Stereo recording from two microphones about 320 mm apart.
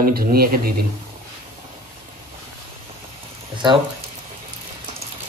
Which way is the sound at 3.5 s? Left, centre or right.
Centre.